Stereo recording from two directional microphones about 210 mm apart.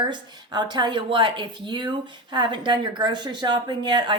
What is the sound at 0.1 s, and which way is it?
Speech, 20° right (ahead or behind).